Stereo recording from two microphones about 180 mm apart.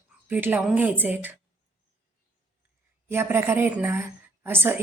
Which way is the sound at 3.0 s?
15° right (ahead or behind).